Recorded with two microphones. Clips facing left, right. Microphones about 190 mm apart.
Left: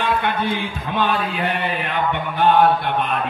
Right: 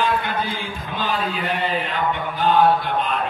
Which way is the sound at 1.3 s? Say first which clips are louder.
Left 1 dB; 65° left (ahead or behind).